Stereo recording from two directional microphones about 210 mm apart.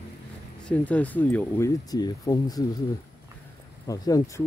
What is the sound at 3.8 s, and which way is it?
Speech, 15° left (ahead or behind).